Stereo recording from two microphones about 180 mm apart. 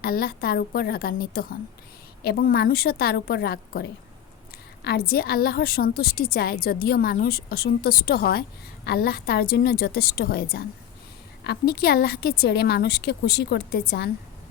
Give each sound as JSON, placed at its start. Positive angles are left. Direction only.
{"t": 0.0, "sound": "a woman's voice", "side_deg": 55}